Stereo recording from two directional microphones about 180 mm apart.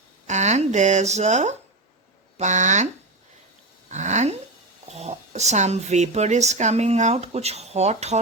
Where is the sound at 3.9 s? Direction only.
40° right (ahead or behind).